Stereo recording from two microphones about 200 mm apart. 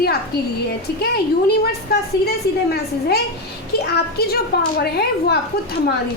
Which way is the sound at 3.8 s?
55° left (ahead or behind).